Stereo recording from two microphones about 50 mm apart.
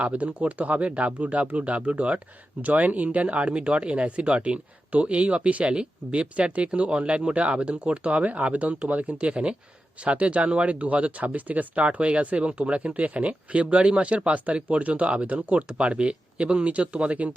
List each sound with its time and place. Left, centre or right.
0.0 s speech: right